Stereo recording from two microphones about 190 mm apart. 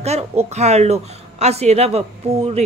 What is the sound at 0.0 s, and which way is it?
Speech, 35° right (ahead or behind).